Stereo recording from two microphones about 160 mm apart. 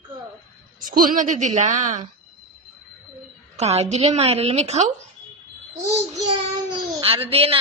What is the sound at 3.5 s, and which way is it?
A woman's voice, 40° right (ahead or behind).